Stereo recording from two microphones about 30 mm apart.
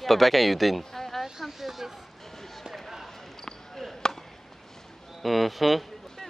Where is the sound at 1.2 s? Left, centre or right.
Centre.